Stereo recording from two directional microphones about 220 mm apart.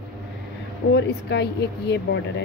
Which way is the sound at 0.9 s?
50° left (ahead or behind).